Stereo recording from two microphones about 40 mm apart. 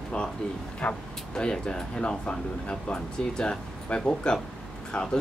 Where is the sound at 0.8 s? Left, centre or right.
Left.